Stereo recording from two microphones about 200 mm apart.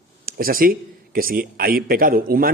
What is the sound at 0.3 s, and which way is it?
A man's voice, 45° right (ahead or behind).